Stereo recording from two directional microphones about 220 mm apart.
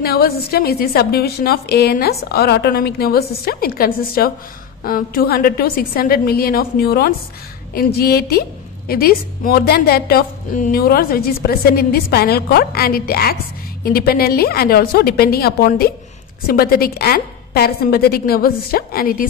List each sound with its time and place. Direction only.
0.0 s a woman's voice: 45° left (ahead or behind)